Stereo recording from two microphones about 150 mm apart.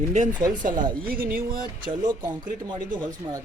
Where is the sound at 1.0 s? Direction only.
75° right (ahead or behind).